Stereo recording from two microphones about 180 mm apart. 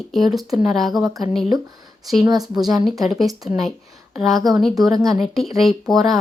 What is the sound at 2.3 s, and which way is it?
Speech, 20° right (ahead or behind).